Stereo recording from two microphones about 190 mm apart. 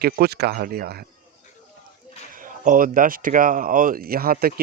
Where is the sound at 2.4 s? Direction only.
45° right (ahead or behind).